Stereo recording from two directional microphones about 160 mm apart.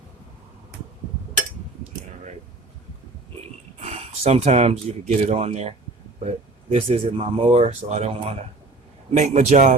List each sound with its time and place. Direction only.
3.8 s a man's voice: 40° right (ahead or behind)